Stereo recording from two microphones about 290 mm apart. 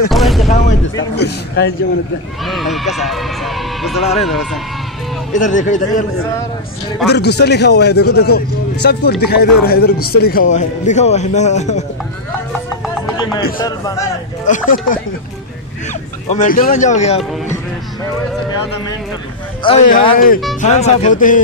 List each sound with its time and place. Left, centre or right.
0.1 s a sound: centre
0.5 s a sound: left
0.9 s a man's voice: left
2.4 s speech: centre
5.3 s a man's voice: left
7.1 s a man's voice: left
13.2 s speech: centre
14.4 s a man's voice: left
16.3 s a man's voice: left
19.6 s a man's voice: left